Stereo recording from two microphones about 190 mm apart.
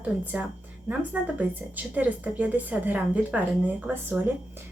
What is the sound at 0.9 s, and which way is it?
Speech, 10° right (ahead or behind).